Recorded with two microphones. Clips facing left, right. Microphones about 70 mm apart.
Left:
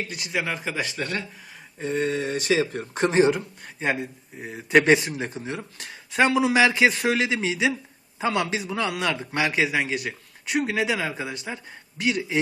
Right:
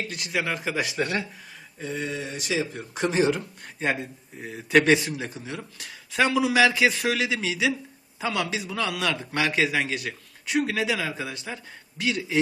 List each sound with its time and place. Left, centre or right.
0.1 s speech: centre
1.8 s speech: left
3.1 s speech: left
3.3 s speech: centre
4.4 s speech: centre